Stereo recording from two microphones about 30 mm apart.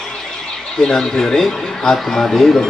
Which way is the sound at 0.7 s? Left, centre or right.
Centre.